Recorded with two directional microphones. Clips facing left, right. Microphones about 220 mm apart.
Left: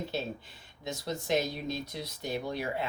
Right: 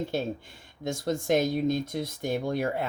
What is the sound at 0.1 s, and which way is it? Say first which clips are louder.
Speech: right 5 dB; 50° right (ahead or behind).